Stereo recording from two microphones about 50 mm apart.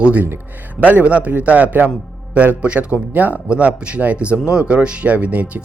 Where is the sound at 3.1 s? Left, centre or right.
Right.